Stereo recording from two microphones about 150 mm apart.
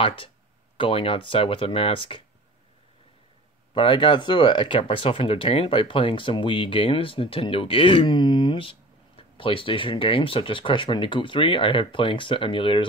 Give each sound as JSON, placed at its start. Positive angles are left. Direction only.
{"t": 0.0, "sound": "speech", "side_deg": 35}
{"t": 3.7, "sound": "speech", "side_deg": 35}